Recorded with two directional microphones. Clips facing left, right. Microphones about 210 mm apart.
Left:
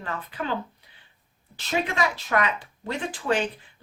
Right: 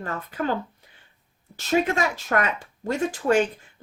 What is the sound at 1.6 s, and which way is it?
Speech, 45° right (ahead or behind).